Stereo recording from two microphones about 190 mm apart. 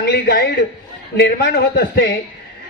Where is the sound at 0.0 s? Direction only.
60° left (ahead or behind).